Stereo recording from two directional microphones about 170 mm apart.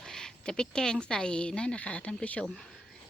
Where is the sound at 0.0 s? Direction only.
5° left (ahead or behind).